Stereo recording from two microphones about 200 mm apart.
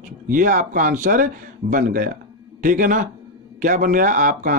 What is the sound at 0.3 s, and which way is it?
Speech, 40° right (ahead or behind).